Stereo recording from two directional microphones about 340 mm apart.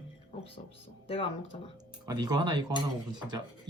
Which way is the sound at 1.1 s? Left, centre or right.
Centre.